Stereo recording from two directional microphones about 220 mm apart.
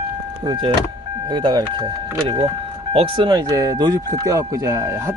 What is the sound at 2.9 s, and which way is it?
Speech, 25° right (ahead or behind).